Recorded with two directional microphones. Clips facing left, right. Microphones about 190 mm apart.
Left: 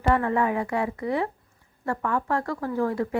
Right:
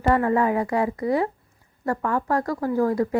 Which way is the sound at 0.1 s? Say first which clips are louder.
Right 3 dB; 35° right (ahead or behind).